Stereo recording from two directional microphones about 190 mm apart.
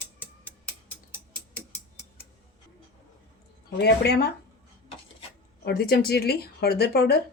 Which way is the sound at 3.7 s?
55° left (ahead or behind).